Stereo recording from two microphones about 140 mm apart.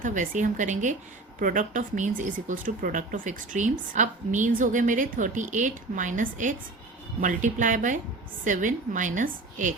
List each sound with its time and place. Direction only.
0.0 s speech: 65° right (ahead or behind)